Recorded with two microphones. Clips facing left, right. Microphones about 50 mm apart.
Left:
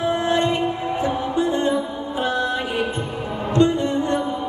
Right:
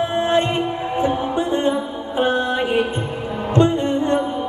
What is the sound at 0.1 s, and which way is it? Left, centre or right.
Music, right.